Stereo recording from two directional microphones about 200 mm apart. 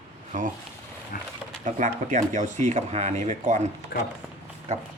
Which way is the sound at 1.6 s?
40° right (ahead or behind).